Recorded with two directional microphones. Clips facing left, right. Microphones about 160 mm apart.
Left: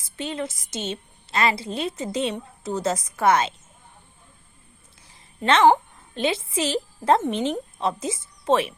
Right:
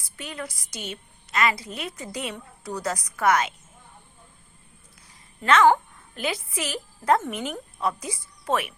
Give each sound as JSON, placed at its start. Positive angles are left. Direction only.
{"t": 0.0, "sound": "a woman's voice", "side_deg": 25}
{"t": 5.0, "sound": "a woman's voice", "side_deg": 30}